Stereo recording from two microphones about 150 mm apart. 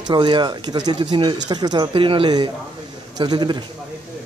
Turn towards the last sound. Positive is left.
turn(degrees=-30)  # may be behind; listen again after turning